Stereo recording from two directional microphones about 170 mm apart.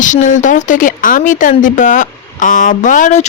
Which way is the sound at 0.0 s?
50° left (ahead or behind).